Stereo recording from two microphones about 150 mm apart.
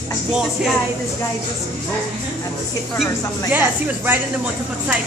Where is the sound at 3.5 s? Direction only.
15° right (ahead or behind).